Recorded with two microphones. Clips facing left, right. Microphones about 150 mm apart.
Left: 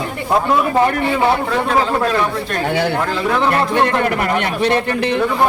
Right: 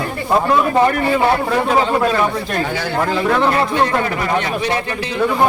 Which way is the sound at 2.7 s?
60° left (ahead or behind).